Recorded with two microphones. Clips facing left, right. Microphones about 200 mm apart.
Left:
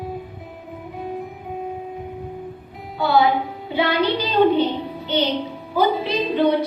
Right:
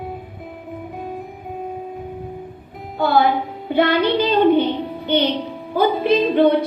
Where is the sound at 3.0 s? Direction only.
50° right (ahead or behind).